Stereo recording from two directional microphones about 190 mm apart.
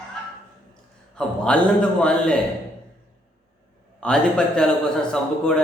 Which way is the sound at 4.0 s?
5° left (ahead or behind).